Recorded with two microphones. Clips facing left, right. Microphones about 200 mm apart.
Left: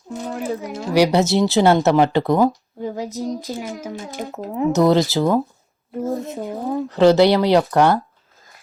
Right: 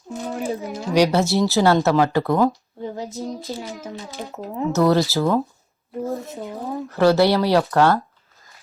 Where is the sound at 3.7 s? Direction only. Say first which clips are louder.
Left 3 dB; 50° left (ahead or behind).